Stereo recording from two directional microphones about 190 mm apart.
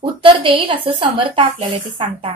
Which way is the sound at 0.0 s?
25° right (ahead or behind).